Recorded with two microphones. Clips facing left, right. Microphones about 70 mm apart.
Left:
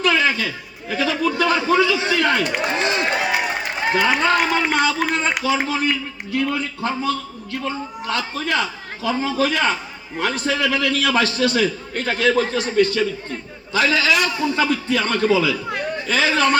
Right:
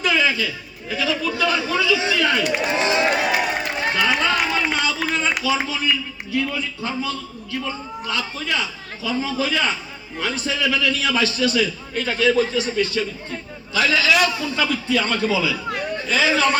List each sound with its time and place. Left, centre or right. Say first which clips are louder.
0.0 s a man's voice: left 2 dB; left
2.6 s speech: right 1 dB; centre
3.2 s run: right 1 dB; centre
4.2 s a man's voice: left 3 dB; left
13.7 s a man's voice: even; left